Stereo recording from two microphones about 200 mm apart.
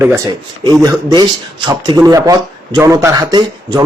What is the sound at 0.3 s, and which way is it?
Speech, 20° right (ahead or behind).